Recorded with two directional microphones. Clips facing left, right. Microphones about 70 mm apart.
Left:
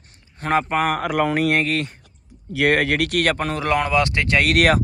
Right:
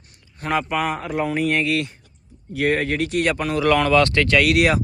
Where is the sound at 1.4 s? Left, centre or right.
Left.